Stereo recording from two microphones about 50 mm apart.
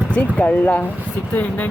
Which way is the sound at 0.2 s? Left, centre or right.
Left.